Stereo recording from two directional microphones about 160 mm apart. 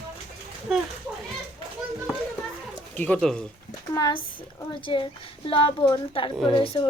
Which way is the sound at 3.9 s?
25° left (ahead or behind).